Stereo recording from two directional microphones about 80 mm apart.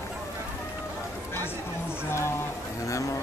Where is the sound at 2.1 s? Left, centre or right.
Left.